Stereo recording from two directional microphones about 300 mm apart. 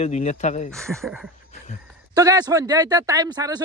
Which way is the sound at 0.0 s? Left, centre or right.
Left.